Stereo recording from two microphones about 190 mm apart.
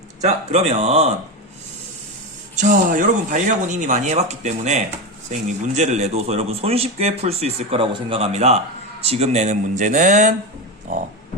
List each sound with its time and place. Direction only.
0.2 s speech: 35° right (ahead or behind)
2.6 s speech: 40° right (ahead or behind)